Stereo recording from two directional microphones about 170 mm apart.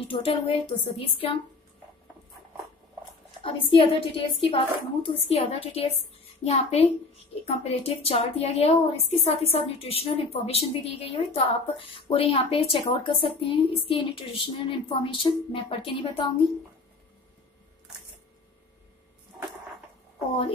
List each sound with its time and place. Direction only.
0.1 s a child's voice: 35° left (ahead or behind)
3.4 s a child's voice: 30° left (ahead or behind)